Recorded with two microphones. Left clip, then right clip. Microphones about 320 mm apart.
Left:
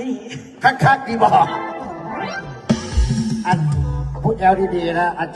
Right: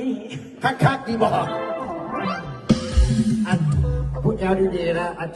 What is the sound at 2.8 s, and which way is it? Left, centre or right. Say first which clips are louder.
Music: even; left.